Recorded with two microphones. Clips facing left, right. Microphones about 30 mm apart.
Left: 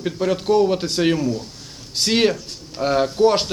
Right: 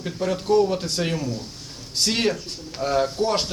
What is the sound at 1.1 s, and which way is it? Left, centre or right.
Speech, left.